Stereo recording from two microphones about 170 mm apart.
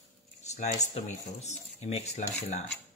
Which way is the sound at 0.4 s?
40° left (ahead or behind).